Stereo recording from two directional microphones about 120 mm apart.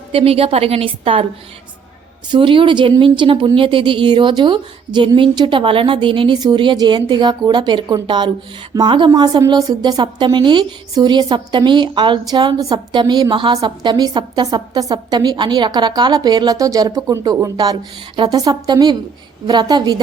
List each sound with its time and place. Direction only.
0.1 s a woman's voice: 50° right (ahead or behind)
2.3 s a woman's voice: 45° right (ahead or behind)